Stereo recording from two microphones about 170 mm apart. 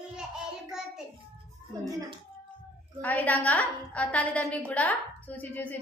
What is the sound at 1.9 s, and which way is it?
Speech, 20° right (ahead or behind).